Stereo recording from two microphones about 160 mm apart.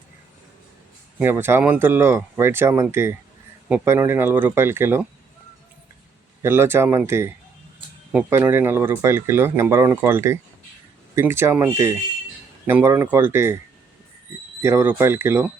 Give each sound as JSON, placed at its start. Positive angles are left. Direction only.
{"t": 1.2, "sound": "speech", "side_deg": -15}
{"t": 6.4, "sound": "speech", "side_deg": -15}
{"t": 14.6, "sound": "speech", "side_deg": -15}